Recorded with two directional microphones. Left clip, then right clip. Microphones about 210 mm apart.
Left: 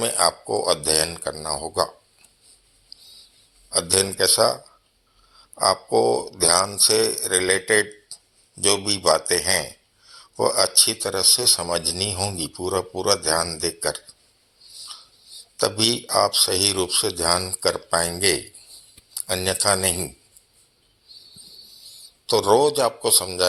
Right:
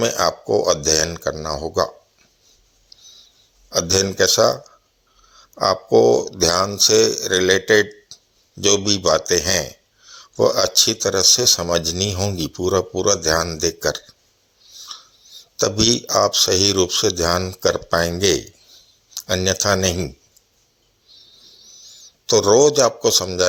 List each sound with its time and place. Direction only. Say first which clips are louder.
0.0 s speech: right 3 dB; 45° right (ahead or behind)
2.9 s a sound: right 1 dB; 90° right
3.7 s speech: right 4 dB; 45° right (ahead or behind)
15.2 s a sound: right 1 dB; 90° right
15.5 s speech: right 3 dB; 45° right (ahead or behind)
21.1 s owl: left 1 dB; 90° right
22.3 s speech: right 4 dB; 45° right (ahead or behind)